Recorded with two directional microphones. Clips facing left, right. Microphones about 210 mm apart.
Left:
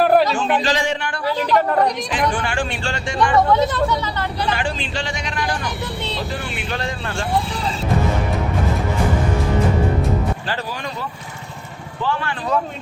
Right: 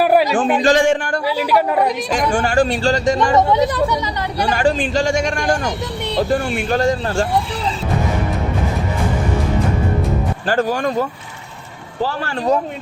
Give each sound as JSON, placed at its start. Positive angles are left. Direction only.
{"t": 0.0, "sound": "a sound", "side_deg": -10}
{"t": 0.6, "sound": "a man's voice", "side_deg": -50}
{"t": 1.4, "sound": "speech", "side_deg": -10}
{"t": 2.3, "sound": "speech", "side_deg": -40}
{"t": 3.3, "sound": "speech", "side_deg": -20}
{"t": 4.5, "sound": "a man's voice", "side_deg": -45}
{"t": 10.4, "sound": "a man's voice", "side_deg": -45}